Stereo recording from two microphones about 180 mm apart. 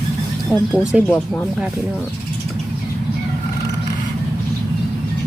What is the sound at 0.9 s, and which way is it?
Speech, 5° right (ahead or behind).